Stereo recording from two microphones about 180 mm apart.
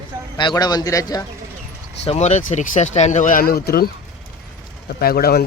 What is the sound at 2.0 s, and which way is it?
Speech, 35° left (ahead or behind).